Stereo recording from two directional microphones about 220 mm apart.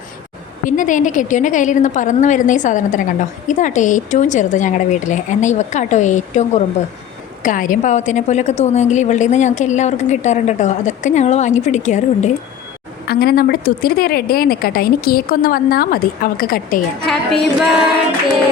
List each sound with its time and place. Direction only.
0.6 s a woman's voice: 35° left (ahead or behind)
13.1 s a woman's voice: 45° left (ahead or behind)
17.1 s singing: centre (ahead or behind)